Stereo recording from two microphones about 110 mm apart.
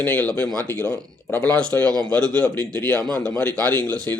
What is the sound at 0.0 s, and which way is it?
Speech, 15° left (ahead or behind).